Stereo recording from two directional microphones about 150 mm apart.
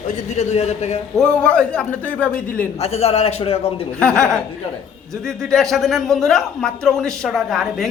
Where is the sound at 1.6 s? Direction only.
5° left (ahead or behind).